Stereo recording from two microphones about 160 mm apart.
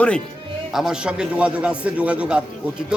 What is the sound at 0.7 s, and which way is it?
A man's voice, centre (ahead or behind).